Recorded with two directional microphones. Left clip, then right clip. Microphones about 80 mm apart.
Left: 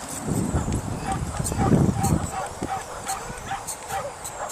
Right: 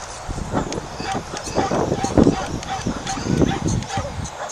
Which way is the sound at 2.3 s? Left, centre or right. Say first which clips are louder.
Right 5 dB; right.